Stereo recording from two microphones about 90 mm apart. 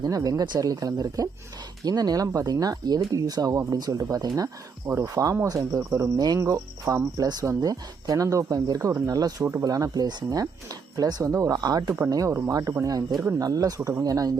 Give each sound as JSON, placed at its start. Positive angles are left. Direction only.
{"t": 0.0, "sound": "speech", "side_deg": -45}
{"t": 6.1, "sound": "speech", "side_deg": -45}
{"t": 6.4, "sound": "speech", "side_deg": -35}
{"t": 9.4, "sound": "speech", "side_deg": -30}
{"t": 9.6, "sound": "speech", "side_deg": -40}